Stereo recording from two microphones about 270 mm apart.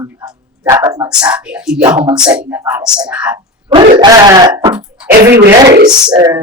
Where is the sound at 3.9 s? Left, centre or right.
Centre.